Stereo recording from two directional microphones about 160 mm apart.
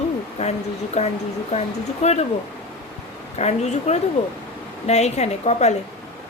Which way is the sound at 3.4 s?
45° left (ahead or behind).